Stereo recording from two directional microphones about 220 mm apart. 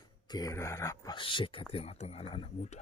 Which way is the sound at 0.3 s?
15° left (ahead or behind).